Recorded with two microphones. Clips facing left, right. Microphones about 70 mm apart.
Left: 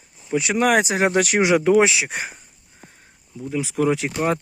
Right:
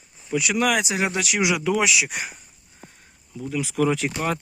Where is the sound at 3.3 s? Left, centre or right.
Left.